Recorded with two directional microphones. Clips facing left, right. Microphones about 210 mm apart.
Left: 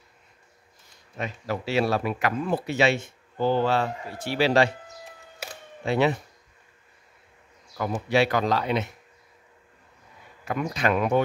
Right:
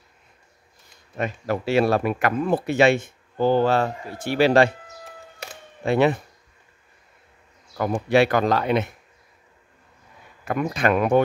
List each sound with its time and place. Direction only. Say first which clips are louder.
1.1 s speech: right 5 dB; 55° right (ahead or behind)
5.9 s speech: right 4 dB; 55° right (ahead or behind)
7.7 s speech: right 5 dB; 55° right (ahead or behind)
10.4 s speech: right 4 dB; 55° right (ahead or behind)